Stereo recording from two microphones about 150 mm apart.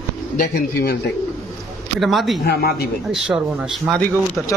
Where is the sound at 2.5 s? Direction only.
90° left.